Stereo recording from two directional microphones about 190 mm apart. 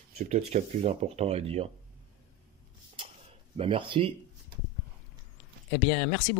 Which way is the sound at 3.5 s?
30° right (ahead or behind).